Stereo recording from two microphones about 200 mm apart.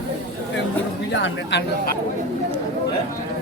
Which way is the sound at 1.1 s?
60° left (ahead or behind).